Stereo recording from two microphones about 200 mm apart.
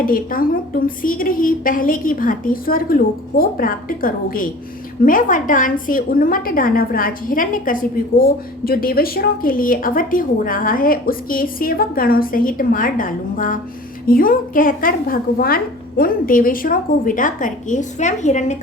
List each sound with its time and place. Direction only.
0.0 s a woman's voice: 45° left (ahead or behind)